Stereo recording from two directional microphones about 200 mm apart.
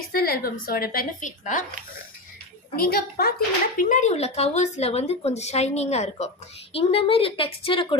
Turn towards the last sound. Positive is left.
turn(degrees=25)  # may be behind; listen again after turning